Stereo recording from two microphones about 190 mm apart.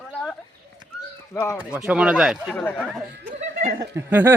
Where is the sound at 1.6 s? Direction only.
5° right (ahead or behind).